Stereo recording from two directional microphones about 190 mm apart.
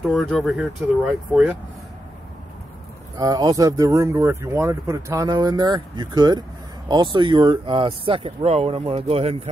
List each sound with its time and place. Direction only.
0.1 s speech: 5° left (ahead or behind)
3.2 s speech: 20° right (ahead or behind)